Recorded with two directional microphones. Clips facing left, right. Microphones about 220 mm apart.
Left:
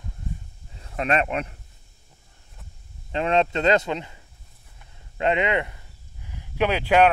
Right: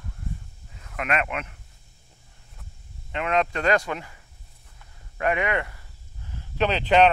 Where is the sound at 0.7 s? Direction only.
30° left (ahead or behind).